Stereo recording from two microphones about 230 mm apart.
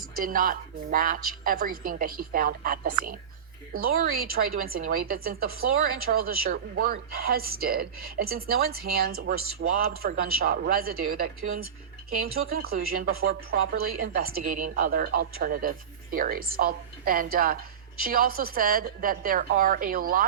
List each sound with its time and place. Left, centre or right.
0.2 s speech: right